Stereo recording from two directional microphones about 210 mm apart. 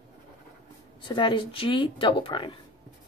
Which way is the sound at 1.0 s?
25° left (ahead or behind).